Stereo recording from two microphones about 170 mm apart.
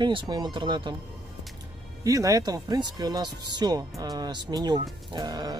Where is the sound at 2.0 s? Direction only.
20° right (ahead or behind).